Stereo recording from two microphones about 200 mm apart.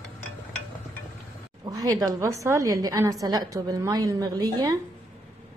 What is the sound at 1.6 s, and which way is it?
A woman's voice, 20° right (ahead or behind).